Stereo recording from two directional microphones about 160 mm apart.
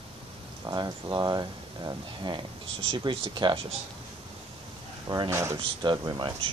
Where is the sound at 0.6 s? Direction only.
25° right (ahead or behind).